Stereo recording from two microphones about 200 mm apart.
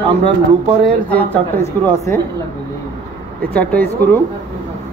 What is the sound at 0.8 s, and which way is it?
Speech, 10° left (ahead or behind).